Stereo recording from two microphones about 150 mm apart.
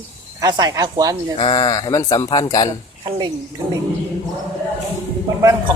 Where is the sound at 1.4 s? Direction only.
30° left (ahead or behind).